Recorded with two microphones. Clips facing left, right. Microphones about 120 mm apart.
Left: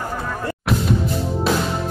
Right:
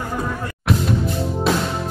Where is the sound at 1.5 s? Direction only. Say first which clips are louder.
Right 1 dB; centre (ahead or behind).